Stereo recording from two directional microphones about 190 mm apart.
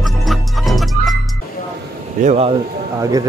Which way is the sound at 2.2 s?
35° right (ahead or behind).